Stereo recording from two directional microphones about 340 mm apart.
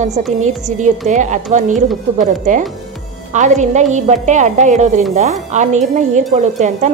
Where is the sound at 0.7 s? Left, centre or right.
Right.